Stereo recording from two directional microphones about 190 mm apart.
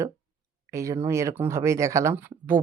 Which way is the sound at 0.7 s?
15° right (ahead or behind).